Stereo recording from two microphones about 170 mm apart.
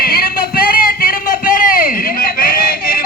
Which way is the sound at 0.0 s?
65° left (ahead or behind).